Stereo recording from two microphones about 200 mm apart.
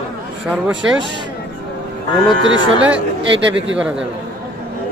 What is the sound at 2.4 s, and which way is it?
Speech, 70° right (ahead or behind).